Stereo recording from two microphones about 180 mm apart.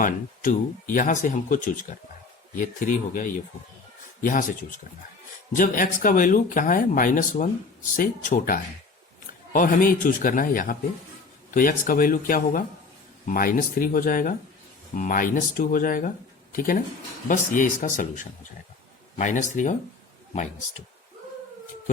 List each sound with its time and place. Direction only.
0.0 s speech: 45° left (ahead or behind)
5.5 s speech: 45° left (ahead or behind)